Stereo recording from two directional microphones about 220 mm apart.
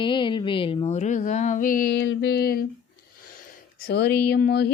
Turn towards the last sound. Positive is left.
turn(degrees=45)  # may be behind; listen again after turning